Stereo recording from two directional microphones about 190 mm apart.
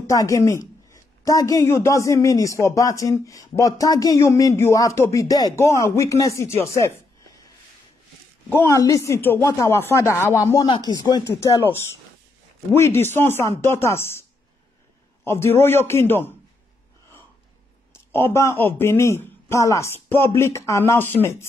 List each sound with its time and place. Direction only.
0.0 s a woman's voice: 15° left (ahead or behind)
8.5 s a woman's voice: 15° left (ahead or behind)
15.2 s a woman's voice: 15° left (ahead or behind)
18.1 s a woman's voice: 15° left (ahead or behind)